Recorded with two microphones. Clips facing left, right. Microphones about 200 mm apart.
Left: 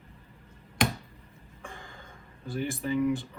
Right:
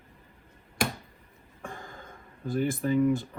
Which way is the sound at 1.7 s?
50° right (ahead or behind).